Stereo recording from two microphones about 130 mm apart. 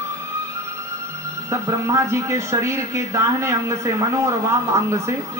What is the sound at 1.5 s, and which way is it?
Speech, 25° right (ahead or behind).